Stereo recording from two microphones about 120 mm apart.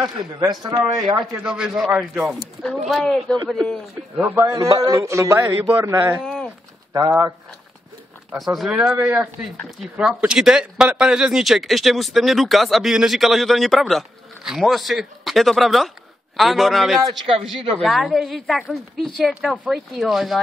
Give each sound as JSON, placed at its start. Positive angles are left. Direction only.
{"t": 0.4, "sound": "a man's voice", "side_deg": -35}
{"t": 1.4, "sound": "speech", "side_deg": -5}
{"t": 4.5, "sound": "speech", "side_deg": -30}
{"t": 8.4, "sound": "speech", "side_deg": 0}